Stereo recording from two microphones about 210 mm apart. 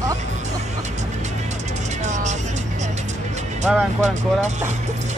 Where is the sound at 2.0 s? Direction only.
35° right (ahead or behind).